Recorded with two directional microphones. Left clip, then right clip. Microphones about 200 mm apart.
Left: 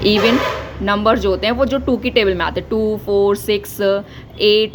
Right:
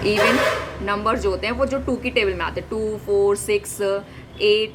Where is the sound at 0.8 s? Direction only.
35° left (ahead or behind).